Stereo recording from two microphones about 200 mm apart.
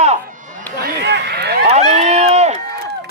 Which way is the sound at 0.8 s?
55° right (ahead or behind).